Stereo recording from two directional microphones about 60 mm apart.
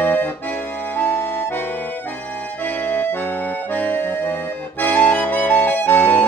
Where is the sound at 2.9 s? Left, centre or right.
Left.